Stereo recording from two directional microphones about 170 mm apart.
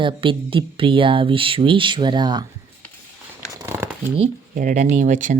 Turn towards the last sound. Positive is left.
turn(degrees=-50)  # may be behind; listen again after turning